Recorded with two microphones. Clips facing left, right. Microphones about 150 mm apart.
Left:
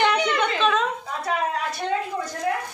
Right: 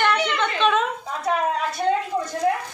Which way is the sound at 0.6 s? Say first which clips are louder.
Right 4 dB; centre (ahead or behind).